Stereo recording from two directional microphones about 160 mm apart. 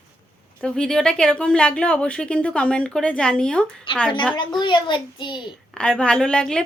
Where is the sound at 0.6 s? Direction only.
5° left (ahead or behind).